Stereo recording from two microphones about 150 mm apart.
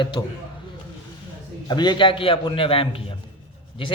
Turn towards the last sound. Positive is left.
turn(degrees=40)  # may be behind; listen again after turning